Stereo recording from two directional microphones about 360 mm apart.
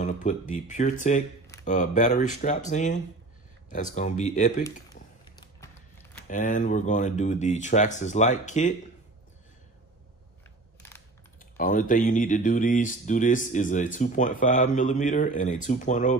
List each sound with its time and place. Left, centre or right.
0.0 s speech: left
6.2 s speech: left
11.5 s speech: left